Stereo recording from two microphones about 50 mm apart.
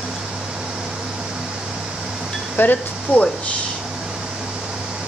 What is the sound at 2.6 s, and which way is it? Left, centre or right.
Speech, left.